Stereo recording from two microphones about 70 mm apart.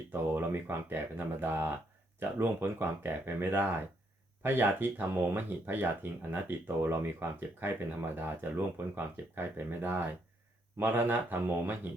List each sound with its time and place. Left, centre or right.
0.1 s speech: right